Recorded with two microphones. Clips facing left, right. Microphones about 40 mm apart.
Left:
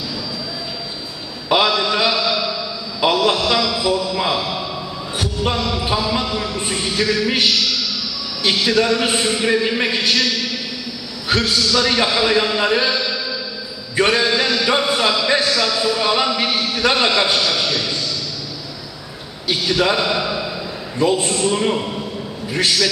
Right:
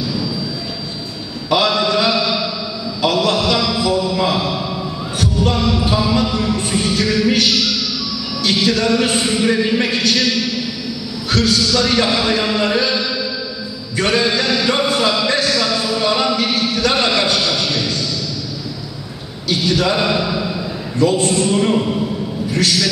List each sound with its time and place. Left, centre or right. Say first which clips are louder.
1.7 s mantra: right 2 dB; centre
3.0 s a sound: even; centre
3.3 s a man's voice: right 1 dB; centre
5.2 s heart sounds: right 3 dB; centre
5.6 s speech: right 4 dB; centre
6.3 s music: right 4 dB; centre
8.6 s speech: right 1 dB; centre
11.2 s a sound: right 2 dB; centre
11.5 s speech: right 1 dB; centre
13.9 s mantra: left 1 dB; centre
14.2 s chant: right 1 dB; centre
15.2 s a sound: even; centre
19.5 s a man's voice: right 1 dB; centre
22.5 s a man's voice: right 1 dB; centre